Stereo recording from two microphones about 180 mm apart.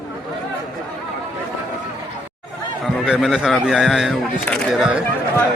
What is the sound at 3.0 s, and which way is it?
A man's voice, 5° right (ahead or behind).